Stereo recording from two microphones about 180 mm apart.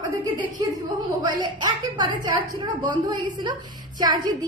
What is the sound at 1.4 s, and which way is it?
A woman's voice, 25° right (ahead or behind).